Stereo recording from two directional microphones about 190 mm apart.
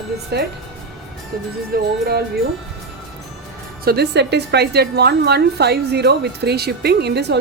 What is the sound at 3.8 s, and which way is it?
A woman's voice, 55° right (ahead or behind).